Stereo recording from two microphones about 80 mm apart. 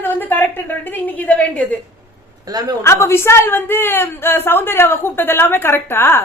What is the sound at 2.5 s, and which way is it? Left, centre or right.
Speech, right.